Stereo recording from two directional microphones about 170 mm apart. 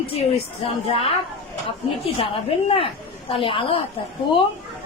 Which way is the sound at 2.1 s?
35° left (ahead or behind).